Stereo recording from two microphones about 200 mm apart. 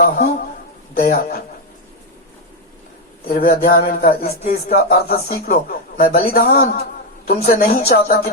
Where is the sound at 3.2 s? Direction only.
50° left (ahead or behind).